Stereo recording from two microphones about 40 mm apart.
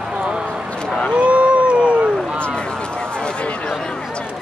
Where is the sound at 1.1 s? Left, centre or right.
Right.